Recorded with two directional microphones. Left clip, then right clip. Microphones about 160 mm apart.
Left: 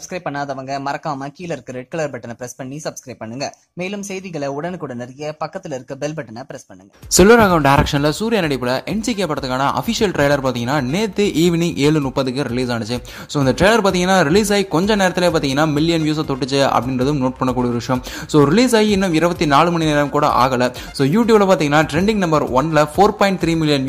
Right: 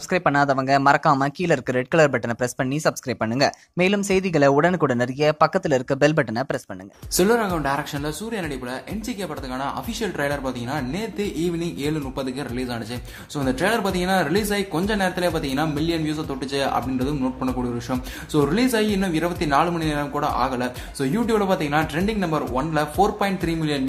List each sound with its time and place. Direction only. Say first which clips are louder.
0.1 s speech: right 5 dB; 15° right (ahead or behind)
7.2 s speech: left 10 dB; 50° left (ahead or behind)